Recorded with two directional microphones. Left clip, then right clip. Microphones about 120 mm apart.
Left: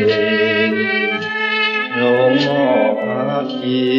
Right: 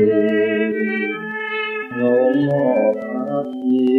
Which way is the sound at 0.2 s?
20° left (ahead or behind).